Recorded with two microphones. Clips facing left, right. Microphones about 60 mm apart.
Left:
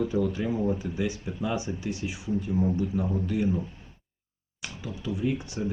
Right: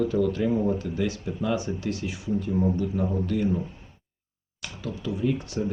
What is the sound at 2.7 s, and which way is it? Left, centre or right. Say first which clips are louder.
Speech: right 2 dB; centre.